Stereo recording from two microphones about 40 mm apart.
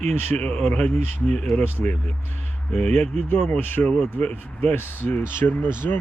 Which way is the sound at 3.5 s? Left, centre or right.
Left.